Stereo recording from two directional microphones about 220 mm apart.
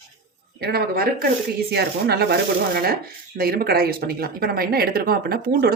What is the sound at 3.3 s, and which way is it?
Speech, 45° right (ahead or behind).